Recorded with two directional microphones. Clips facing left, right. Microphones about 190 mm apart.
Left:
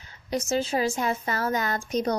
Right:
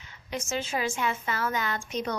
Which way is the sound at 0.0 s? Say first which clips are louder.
Left 6 dB; 40° left (ahead or behind).